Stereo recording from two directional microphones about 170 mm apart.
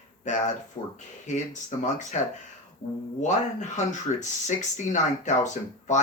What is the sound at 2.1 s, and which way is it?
Speech, 40° left (ahead or behind).